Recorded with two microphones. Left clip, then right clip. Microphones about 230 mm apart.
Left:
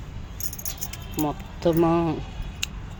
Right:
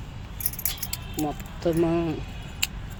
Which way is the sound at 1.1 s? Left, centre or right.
Left.